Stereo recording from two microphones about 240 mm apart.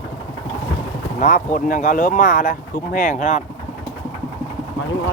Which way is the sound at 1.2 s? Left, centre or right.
Left.